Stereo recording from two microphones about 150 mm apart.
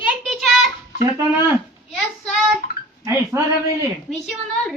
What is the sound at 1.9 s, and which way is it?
Speech, centre (ahead or behind).